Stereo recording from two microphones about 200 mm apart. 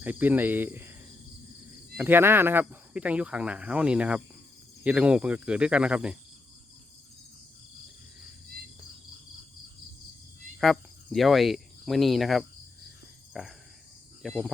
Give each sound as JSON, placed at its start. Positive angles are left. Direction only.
{"t": 0.0, "sound": "speech", "side_deg": -10}
{"t": 2.0, "sound": "speech", "side_deg": -10}
{"t": 10.6, "sound": "speech", "side_deg": 0}